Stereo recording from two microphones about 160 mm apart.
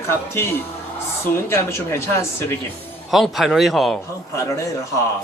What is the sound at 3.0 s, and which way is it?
Speech, centre (ahead or behind).